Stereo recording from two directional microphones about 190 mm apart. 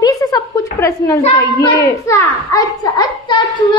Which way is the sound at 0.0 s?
20° left (ahead or behind).